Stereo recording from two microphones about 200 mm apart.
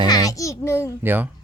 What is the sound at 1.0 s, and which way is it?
Speech, 10° right (ahead or behind).